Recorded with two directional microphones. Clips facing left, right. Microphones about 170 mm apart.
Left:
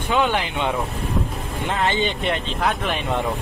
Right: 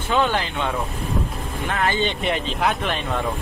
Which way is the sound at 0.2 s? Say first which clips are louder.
Left 1 dB; 15° left (ahead or behind).